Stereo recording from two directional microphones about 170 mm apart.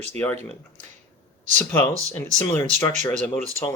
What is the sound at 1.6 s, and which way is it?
Speech, 10° left (ahead or behind).